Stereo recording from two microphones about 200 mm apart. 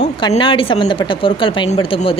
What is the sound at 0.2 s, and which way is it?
Speech, 20° left (ahead or behind).